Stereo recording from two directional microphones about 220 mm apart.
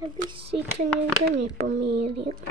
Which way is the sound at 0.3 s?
25° right (ahead or behind).